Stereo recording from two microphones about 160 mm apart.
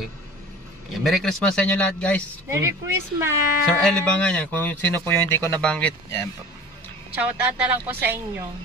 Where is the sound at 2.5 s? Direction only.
15° right (ahead or behind).